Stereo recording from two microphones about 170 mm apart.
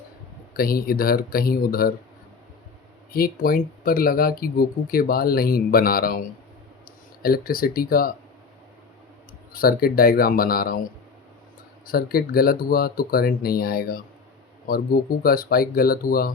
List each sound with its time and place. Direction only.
0.5 s speech: 60° left (ahead or behind)
3.1 s speech: 60° left (ahead or behind)
9.5 s speech: 60° left (ahead or behind)
11.9 s speech: 60° left (ahead or behind)